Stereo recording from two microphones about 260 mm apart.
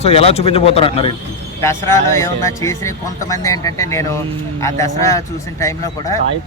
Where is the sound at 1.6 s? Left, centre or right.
Centre.